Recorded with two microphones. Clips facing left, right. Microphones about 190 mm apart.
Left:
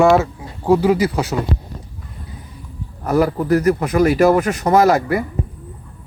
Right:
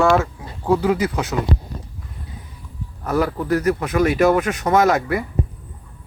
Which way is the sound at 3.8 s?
35° left (ahead or behind).